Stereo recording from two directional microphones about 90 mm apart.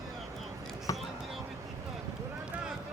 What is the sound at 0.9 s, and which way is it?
Basketball bounce, 40° left (ahead or behind).